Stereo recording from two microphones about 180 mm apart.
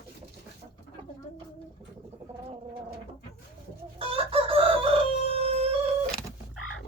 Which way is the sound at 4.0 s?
30° right (ahead or behind).